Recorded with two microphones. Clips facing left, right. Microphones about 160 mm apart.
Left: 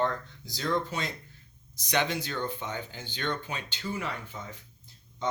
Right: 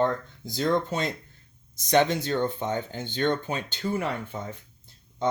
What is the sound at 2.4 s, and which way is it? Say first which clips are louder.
Speech: right 7 dB; 50° right (ahead or behind).